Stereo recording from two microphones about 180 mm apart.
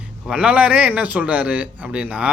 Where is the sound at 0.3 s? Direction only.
5° right (ahead or behind).